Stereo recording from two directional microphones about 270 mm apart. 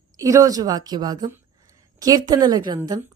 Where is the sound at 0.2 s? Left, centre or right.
Centre.